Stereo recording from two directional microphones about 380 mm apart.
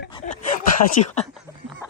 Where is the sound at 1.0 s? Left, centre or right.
Left.